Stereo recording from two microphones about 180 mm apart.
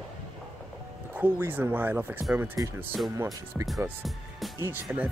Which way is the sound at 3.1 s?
20° right (ahead or behind).